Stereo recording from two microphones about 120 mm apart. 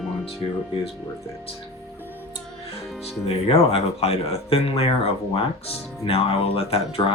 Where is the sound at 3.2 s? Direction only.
55° left (ahead or behind).